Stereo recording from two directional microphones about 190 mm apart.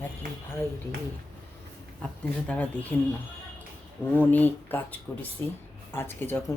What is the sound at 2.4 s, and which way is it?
Speech, 5° left (ahead or behind).